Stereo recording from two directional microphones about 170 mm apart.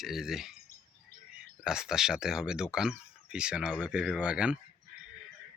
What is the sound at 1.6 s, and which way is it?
Speech, 5° right (ahead or behind).